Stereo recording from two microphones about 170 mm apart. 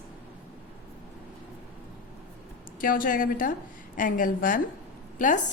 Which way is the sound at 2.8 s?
55° left (ahead or behind).